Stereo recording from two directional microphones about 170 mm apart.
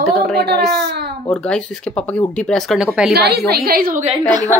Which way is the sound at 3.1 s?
70° right (ahead or behind).